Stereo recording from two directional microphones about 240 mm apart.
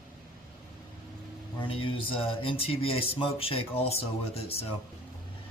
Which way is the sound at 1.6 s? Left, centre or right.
Left.